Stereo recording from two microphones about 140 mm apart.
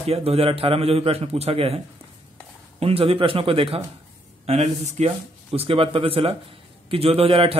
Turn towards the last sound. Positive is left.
turn(degrees=-40)  # may be behind; listen again after turning